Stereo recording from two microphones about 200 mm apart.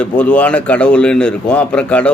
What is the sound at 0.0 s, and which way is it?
A man's voice, 5° left (ahead or behind).